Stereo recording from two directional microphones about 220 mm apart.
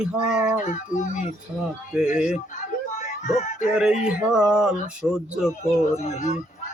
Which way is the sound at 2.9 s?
35° left (ahead or behind).